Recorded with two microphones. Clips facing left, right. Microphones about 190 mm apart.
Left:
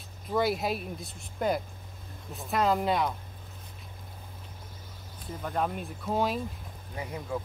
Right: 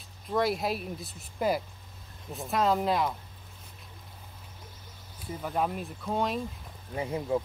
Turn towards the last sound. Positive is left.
turn(degrees=-25)  # may be behind; listen again after turning